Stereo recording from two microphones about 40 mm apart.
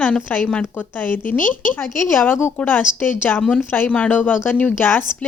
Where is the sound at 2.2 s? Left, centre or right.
Left.